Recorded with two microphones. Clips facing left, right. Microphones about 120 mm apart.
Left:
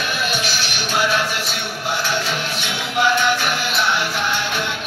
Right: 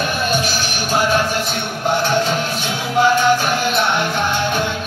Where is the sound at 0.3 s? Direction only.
45° right (ahead or behind).